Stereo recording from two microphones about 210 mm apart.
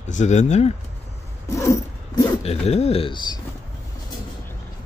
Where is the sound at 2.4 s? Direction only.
30° left (ahead or behind).